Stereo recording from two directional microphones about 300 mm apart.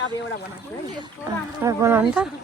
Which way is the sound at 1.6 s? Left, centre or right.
Centre.